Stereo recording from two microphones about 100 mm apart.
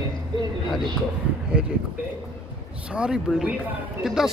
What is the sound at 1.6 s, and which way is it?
Speech, 10° right (ahead or behind).